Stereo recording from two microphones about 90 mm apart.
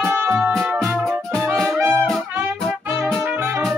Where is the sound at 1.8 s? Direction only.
20° right (ahead or behind).